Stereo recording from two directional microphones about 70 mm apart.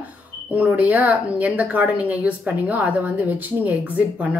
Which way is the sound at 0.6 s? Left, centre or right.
Right.